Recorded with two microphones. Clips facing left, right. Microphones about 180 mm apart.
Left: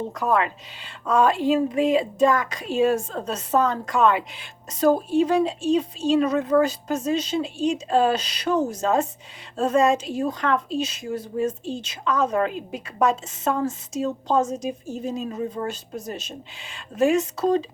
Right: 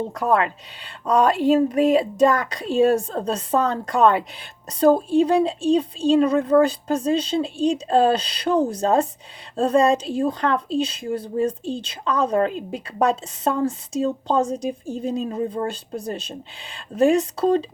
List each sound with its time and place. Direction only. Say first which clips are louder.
0.1 s a woman's voice: right 1 dB; 35° right (ahead or behind)